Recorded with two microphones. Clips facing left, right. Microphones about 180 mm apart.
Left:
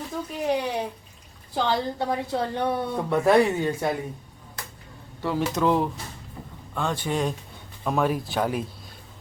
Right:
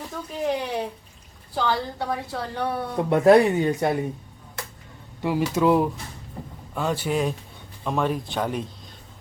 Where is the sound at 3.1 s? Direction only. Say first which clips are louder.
Right 4 dB; 20° right (ahead or behind).